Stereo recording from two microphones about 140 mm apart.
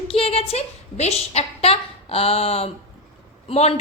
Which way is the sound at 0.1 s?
45° left (ahead or behind).